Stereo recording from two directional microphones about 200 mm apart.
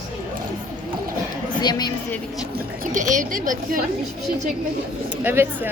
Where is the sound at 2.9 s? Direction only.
40° right (ahead or behind).